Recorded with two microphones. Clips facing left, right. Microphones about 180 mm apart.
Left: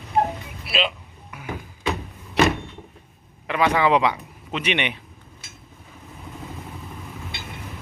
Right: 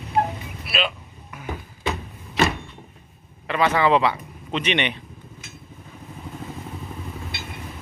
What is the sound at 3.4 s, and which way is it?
A man's voice, 10° left (ahead or behind).